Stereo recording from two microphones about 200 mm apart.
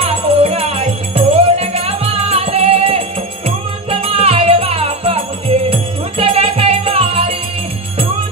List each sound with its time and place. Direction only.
0.0 s music: 30° right (ahead or behind)